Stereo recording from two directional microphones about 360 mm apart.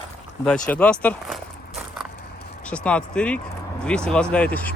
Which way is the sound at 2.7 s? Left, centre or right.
Centre.